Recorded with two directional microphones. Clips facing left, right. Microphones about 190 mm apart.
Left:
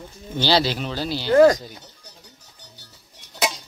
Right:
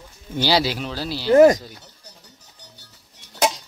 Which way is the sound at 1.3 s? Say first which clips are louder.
Right 2 dB; 20° right (ahead or behind).